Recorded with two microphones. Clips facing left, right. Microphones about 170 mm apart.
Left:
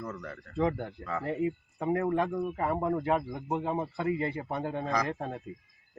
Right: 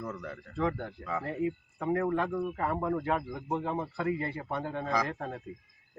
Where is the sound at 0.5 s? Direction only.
20° left (ahead or behind).